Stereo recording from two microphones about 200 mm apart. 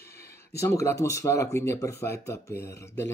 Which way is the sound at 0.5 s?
15° left (ahead or behind).